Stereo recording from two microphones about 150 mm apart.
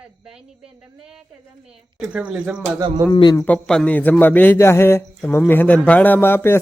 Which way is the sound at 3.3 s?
10° left (ahead or behind).